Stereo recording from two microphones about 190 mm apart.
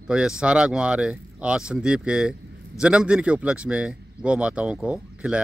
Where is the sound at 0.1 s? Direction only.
5° right (ahead or behind).